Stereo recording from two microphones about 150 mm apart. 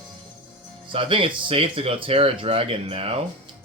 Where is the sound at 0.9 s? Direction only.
35° right (ahead or behind).